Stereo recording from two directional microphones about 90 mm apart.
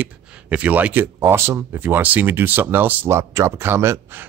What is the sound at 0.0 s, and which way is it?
Speech, 15° right (ahead or behind).